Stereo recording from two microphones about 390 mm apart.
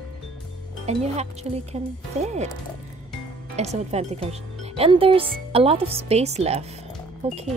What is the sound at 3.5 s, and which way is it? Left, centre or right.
Speech, centre.